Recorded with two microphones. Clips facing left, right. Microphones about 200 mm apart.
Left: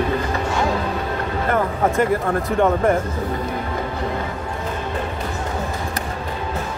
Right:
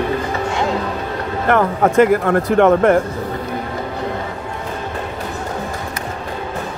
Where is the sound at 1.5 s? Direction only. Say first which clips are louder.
Right 5 dB; 75° right (ahead or behind).